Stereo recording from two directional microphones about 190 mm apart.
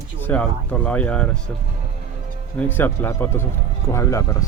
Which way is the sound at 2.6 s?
10° left (ahead or behind).